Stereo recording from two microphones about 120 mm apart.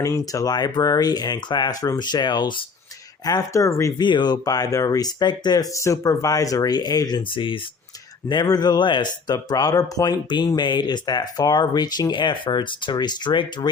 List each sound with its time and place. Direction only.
0.0 s speech: 30° left (ahead or behind)
3.2 s speech: 30° left (ahead or behind)
4.0 s speech: 40° left (ahead or behind)